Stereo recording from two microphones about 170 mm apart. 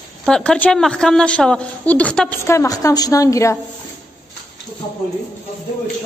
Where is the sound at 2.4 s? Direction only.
15° left (ahead or behind).